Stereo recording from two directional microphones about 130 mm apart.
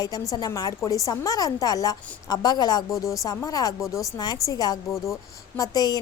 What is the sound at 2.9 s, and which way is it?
Speech, centre (ahead or behind).